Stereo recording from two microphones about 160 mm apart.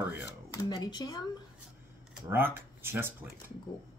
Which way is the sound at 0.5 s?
25° left (ahead or behind).